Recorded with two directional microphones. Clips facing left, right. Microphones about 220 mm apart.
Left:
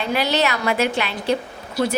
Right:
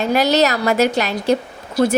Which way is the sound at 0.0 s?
45° right (ahead or behind).